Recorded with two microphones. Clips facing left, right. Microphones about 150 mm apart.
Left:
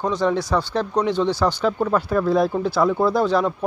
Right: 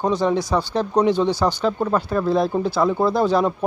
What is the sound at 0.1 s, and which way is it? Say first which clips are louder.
Speech: right 1 dB; 5° right (ahead or behind).